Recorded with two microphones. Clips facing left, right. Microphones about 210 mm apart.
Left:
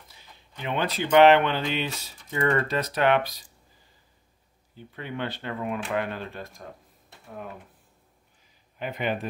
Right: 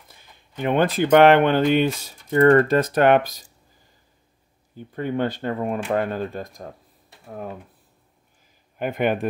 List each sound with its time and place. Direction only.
0.1 s speech: 50° right (ahead or behind)
4.7 s speech: 45° right (ahead or behind)
8.7 s speech: 50° right (ahead or behind)